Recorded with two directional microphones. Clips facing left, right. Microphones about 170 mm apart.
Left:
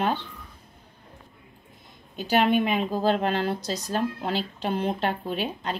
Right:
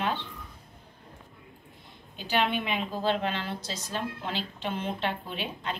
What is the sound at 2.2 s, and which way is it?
A woman's voice, 45° left (ahead or behind).